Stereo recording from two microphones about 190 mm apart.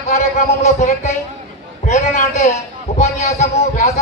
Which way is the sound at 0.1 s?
35° left (ahead or behind).